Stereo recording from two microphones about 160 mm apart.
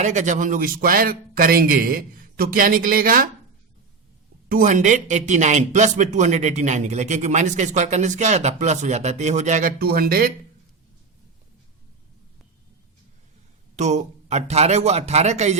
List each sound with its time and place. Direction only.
0.0 s speech: 50° right (ahead or behind)
4.4 s speech: 60° right (ahead or behind)
13.7 s speech: 45° right (ahead or behind)